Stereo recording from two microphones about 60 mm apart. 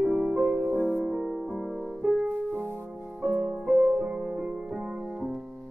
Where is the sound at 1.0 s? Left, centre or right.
Centre.